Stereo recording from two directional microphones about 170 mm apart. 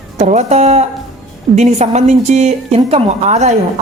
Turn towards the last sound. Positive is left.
turn(degrees=-40)  # may be behind; listen again after turning